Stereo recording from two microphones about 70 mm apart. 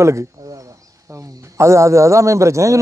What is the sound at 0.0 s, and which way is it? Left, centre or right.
A man's voice, right.